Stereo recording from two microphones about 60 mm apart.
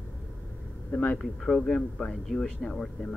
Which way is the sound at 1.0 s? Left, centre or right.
Centre.